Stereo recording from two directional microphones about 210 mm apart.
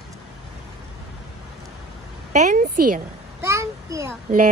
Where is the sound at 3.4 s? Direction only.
10° right (ahead or behind).